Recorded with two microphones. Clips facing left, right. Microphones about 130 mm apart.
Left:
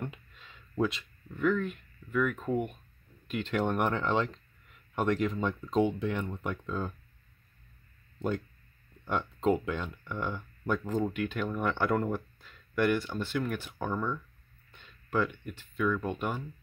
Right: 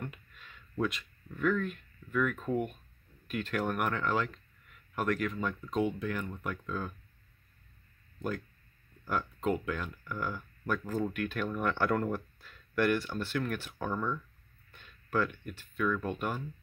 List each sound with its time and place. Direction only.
0.0 s a sound: 25° left (ahead or behind)
1.4 s speech: 15° left (ahead or behind)
8.2 s speech: 30° left (ahead or behind)